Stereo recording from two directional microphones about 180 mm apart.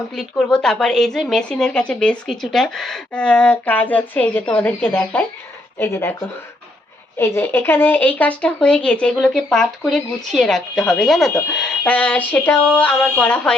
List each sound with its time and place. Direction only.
0.2 s speech: 5° left (ahead or behind)
7.2 s speech: 15° left (ahead or behind)